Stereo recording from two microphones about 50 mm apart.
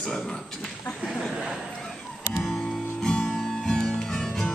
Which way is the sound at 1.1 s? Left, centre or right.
Centre.